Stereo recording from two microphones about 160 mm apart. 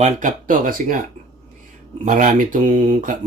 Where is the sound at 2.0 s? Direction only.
55° right (ahead or behind).